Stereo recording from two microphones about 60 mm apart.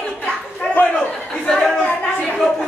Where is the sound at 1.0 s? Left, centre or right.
Centre.